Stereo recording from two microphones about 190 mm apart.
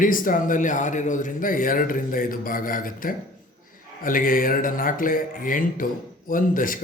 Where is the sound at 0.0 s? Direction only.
45° left (ahead or behind).